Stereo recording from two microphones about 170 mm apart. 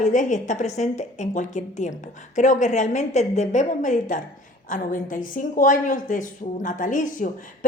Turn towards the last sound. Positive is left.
turn(degrees=50)  # may be behind; listen again after turning